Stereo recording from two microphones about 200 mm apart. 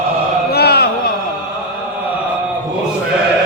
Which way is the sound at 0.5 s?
50° left (ahead or behind).